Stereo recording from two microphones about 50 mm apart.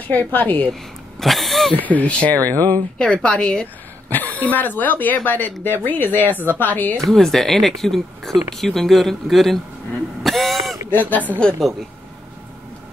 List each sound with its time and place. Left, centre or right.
0.1 s speech: left
1.2 s a sound: centre
1.9 s speech: left
3.0 s a woman's voice: centre
4.1 s speech: left
7.1 s speech: centre
10.2 s throat clearing: centre
10.9 s speech: left